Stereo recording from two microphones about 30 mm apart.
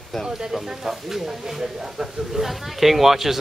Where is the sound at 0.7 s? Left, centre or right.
Centre.